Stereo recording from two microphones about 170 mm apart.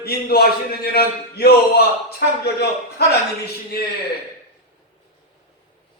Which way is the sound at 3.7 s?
65° left (ahead or behind).